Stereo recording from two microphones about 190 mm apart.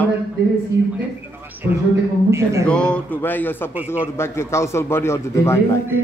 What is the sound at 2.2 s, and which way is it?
Speech, 15° right (ahead or behind).